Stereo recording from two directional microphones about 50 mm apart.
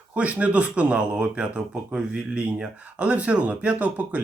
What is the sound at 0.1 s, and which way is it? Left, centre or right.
Speech, right.